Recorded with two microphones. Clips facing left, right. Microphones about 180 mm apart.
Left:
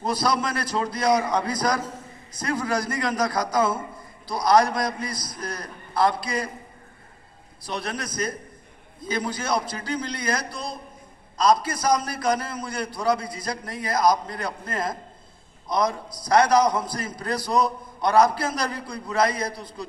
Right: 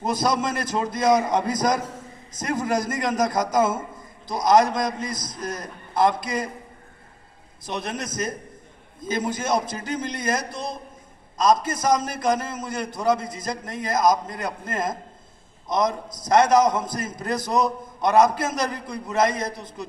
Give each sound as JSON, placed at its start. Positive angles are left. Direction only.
{"t": 0.0, "sound": "a man's voice", "side_deg": -20}
{"t": 7.6, "sound": "a man's voice", "side_deg": -20}
{"t": 15.9, "sound": "a man's voice", "side_deg": -45}
{"t": 16.3, "sound": "a man's voice", "side_deg": -20}